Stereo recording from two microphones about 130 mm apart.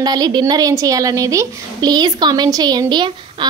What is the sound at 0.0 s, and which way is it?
A woman's voice, 30° right (ahead or behind).